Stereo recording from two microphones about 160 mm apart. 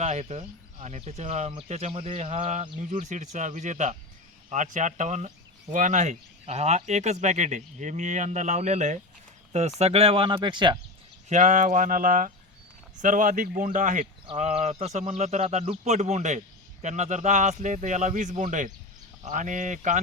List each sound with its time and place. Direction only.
0.0 s speech: 45° right (ahead or behind)
11.3 s speech: 50° right (ahead or behind)